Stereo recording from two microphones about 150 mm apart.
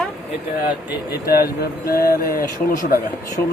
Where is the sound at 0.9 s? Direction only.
90° left; by 2.9 s 75° left (ahead or behind).